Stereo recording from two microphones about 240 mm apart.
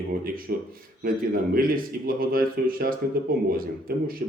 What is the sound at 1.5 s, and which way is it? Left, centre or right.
Speech, right.